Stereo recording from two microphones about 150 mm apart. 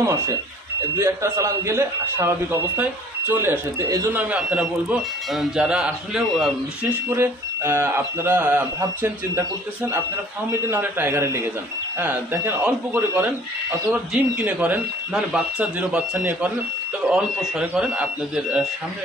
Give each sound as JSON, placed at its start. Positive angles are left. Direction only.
{"t": 0.0, "sound": "a man's voice", "side_deg": -20}
{"t": 4.2, "sound": "a man's voice", "side_deg": -5}
{"t": 7.2, "sound": "a man's voice", "side_deg": -15}
{"t": 10.5, "sound": "a man's voice", "side_deg": -15}